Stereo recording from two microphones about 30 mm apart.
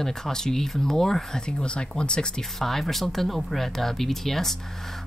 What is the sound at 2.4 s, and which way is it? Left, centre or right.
Speech, centre.